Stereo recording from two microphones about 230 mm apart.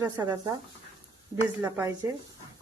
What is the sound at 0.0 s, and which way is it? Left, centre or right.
Speech, centre.